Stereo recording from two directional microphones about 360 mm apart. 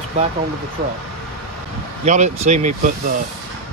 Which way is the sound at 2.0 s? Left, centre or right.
Centre.